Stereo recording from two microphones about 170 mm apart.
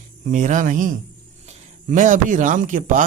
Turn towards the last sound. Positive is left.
turn(degrees=-50)  # may be behind; listen again after turning